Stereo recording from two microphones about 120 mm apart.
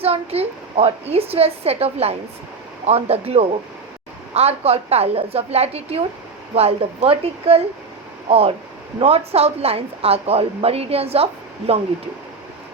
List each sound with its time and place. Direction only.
0.0 s a woman's voice: 55° right (ahead or behind)